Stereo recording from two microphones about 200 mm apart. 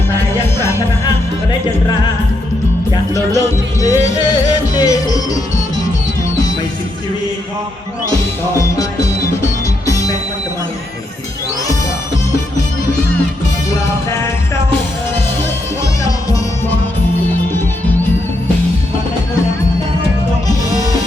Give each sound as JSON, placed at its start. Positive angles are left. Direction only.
{"t": 2.9, "sound": "music", "side_deg": 15}
{"t": 9.8, "sound": "music", "side_deg": 15}